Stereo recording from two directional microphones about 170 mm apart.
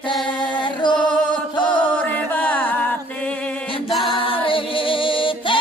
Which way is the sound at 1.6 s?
10° left (ahead or behind).